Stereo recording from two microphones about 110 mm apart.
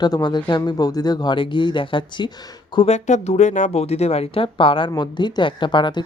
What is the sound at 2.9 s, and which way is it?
Speech, 85° left.